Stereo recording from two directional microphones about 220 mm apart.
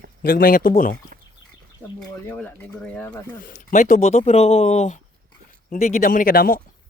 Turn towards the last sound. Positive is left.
turn(degrees=40)  # may be behind; listen again after turning